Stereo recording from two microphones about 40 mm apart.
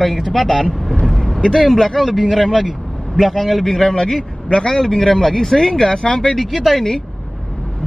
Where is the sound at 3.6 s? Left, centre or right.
Centre.